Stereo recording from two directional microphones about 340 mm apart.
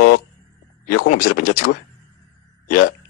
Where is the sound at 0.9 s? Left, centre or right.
Left.